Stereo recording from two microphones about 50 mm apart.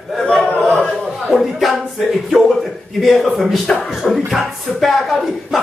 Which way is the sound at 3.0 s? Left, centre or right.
Centre.